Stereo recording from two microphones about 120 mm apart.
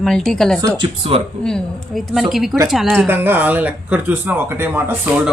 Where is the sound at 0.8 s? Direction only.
55° right (ahead or behind).